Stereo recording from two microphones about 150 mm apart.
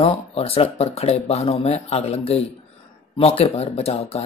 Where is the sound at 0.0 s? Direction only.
40° left (ahead or behind).